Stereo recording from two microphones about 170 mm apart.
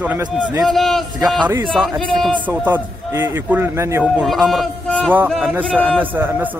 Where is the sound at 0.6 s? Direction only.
Centre (ahead or behind).